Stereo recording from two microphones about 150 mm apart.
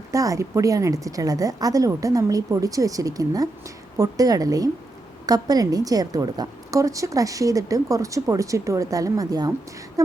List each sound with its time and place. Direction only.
0.1 s a woman's voice: 20° right (ahead or behind)